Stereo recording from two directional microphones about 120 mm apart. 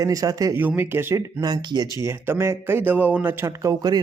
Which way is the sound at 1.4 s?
35° right (ahead or behind).